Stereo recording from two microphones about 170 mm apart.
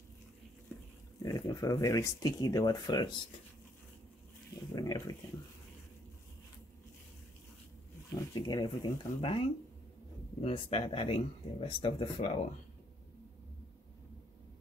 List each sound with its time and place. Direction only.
1.2 s speech: 20° left (ahead or behind)
4.7 s speech: 20° left (ahead or behind)
8.1 s speech: 25° left (ahead or behind)